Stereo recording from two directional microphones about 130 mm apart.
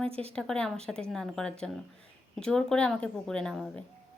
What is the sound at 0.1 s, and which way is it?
Speech, 50° right (ahead or behind).